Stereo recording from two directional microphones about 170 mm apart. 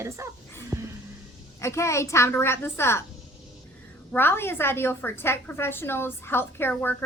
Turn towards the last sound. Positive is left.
turn(degrees=10)  # may be behind; listen again after turning